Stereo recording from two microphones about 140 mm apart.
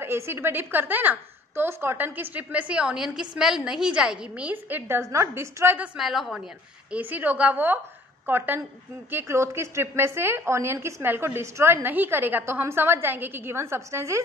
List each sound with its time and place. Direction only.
0.0 s a woman's voice: 15° right (ahead or behind)
5.9 s a woman's voice: centre (ahead or behind)
6.9 s a woman's voice: 10° right (ahead or behind)